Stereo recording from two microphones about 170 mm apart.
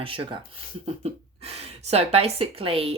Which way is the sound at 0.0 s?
30° right (ahead or behind).